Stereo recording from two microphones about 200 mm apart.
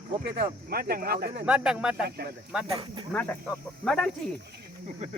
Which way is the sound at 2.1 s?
50° right (ahead or behind).